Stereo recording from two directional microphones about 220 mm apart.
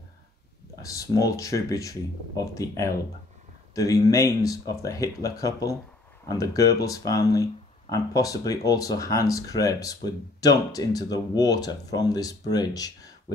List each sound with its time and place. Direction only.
0.8 s speech: 15° left (ahead or behind)